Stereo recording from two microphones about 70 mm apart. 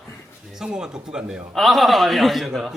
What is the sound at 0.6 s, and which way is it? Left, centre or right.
Speech, centre.